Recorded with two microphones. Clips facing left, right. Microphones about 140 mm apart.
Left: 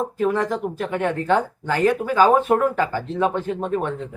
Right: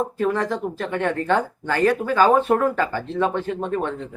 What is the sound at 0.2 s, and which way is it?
Speech, 10° left (ahead or behind).